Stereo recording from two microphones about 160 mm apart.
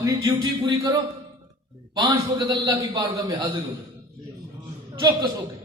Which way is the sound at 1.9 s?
30° right (ahead or behind).